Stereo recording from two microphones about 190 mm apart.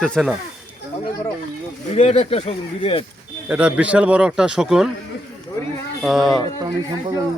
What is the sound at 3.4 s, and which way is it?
Speech, 5° right (ahead or behind).